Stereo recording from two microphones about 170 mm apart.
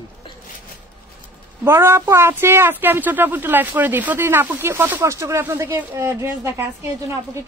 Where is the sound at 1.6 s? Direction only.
15° right (ahead or behind).